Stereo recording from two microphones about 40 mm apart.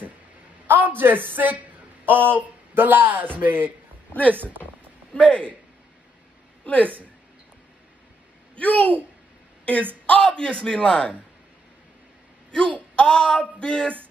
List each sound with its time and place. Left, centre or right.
0.7 s a man's voice: right
5.1 s a man's voice: left
6.6 s a woman's voice: left
8.5 s a man's voice: left
10.0 s a man's voice: left
12.4 s a sound: left
12.9 s a man's voice: left